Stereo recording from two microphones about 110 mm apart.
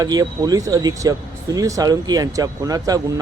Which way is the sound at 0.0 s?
35° right (ahead or behind).